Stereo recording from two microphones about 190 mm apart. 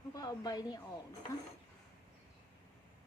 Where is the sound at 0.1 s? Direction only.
20° left (ahead or behind).